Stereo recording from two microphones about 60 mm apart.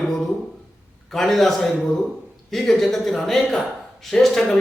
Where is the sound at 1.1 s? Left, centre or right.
Centre.